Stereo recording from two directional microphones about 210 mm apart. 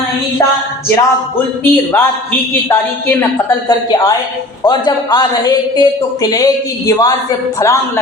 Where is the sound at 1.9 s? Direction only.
10° left (ahead or behind).